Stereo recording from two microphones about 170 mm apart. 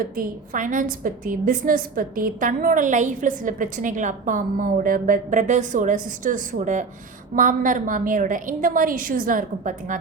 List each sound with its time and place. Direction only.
0.0 s a woman's voice: 50° right (ahead or behind)